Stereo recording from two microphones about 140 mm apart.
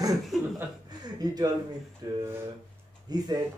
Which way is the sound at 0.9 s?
30° right (ahead or behind).